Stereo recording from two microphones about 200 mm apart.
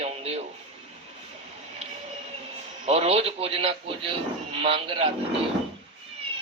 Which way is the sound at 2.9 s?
30° right (ahead or behind).